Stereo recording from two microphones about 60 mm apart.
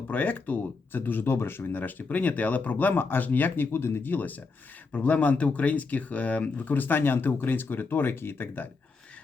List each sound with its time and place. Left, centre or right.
0.1 s speech: left